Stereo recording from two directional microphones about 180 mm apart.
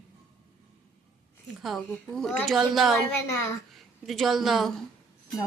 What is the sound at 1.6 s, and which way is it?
A woman's voice, centre (ahead or behind).